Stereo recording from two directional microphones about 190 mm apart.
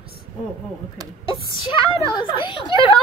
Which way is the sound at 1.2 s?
25° left (ahead or behind).